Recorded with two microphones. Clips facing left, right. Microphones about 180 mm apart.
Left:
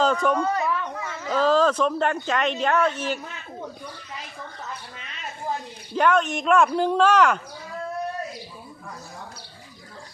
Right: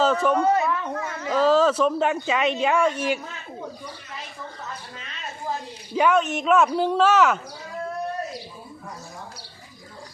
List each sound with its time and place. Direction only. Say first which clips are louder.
0.0 s speech: right 1 dB; 5° right (ahead or behind)
0.3 s speech: right 4 dB; 25° right (ahead or behind)
0.9 s speech: right 2 dB; 5° right (ahead or behind)
5.9 s speech: right 1 dB; 5° right (ahead or behind)